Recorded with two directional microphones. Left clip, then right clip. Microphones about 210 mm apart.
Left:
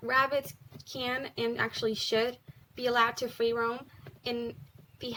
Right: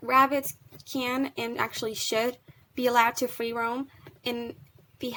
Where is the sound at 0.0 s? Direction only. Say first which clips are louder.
Right 5 dB; 40° right (ahead or behind).